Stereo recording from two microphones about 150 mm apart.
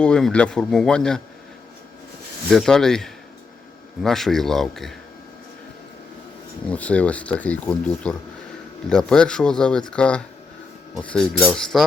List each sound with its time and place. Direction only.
0.0 s speech: 5° left (ahead or behind)
2.5 s speech: 5° left (ahead or behind)
6.7 s speech: 10° left (ahead or behind)